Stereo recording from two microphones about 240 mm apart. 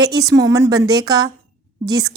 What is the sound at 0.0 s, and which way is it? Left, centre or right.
Speech, centre.